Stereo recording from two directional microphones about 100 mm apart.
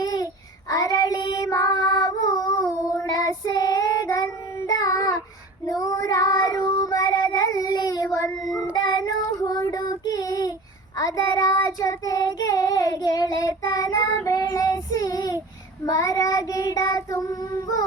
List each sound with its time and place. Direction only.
0.0 s child singing: 40° left (ahead or behind)
1.7 s child singing: 45° left (ahead or behind)